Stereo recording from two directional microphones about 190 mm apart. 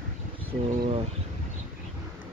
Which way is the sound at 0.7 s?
40° right (ahead or behind).